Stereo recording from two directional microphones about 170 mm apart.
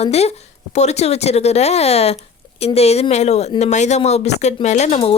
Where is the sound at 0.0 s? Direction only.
40° left (ahead or behind).